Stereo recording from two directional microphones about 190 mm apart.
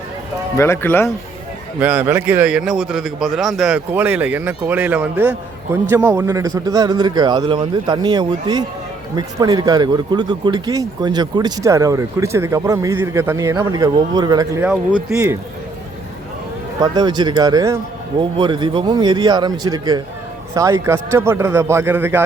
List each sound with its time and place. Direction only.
0.5 s speech: 15° left (ahead or behind)
1.8 s a man's voice: 10° right (ahead or behind)
14.6 s a man's voice: 5° right (ahead or behind)
16.8 s a man's voice: 20° right (ahead or behind)